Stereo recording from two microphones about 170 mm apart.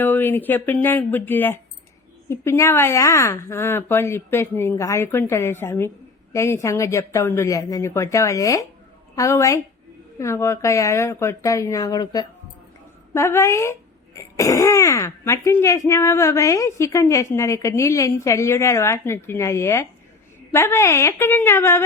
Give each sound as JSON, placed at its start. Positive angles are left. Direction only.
{"t": 0.0, "sound": "a woman's voice", "side_deg": 10}